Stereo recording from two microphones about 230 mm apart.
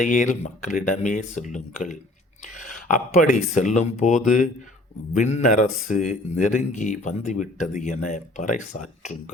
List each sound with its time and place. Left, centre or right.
0.0 s speech: left